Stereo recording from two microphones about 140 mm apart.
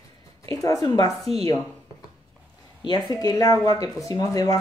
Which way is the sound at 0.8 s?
30° left (ahead or behind).